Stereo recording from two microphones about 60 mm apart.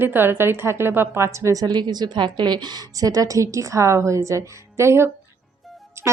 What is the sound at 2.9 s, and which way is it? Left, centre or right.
A woman's voice, right.